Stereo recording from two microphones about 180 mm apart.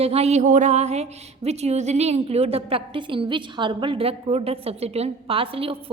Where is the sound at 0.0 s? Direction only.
35° right (ahead or behind).